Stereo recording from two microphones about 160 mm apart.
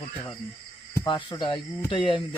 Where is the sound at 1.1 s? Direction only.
30° left (ahead or behind).